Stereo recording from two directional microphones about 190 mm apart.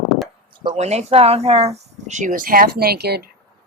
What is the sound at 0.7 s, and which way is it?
Speech, 35° right (ahead or behind).